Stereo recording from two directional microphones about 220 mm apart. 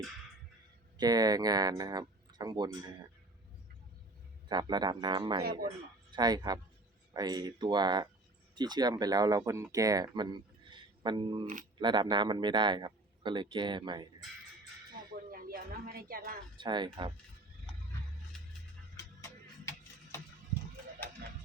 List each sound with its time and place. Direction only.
0.9 s speech: 20° right (ahead or behind)
4.4 s a man's voice: 20° right (ahead or behind)
15.3 s a sound: 40° right (ahead or behind)
16.6 s a man's voice: 20° right (ahead or behind)
18.9 s music: 15° left (ahead or behind)